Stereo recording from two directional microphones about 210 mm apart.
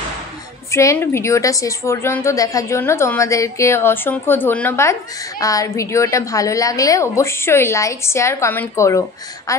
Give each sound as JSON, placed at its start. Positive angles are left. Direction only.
{"t": 0.7, "sound": "a woman's voice", "side_deg": 15}